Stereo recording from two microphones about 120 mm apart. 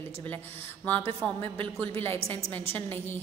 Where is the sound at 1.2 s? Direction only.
10° left (ahead or behind).